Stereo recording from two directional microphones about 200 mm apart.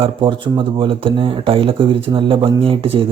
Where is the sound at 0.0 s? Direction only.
25° right (ahead or behind).